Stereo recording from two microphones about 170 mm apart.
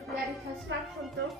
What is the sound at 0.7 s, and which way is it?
Speech, 90° right.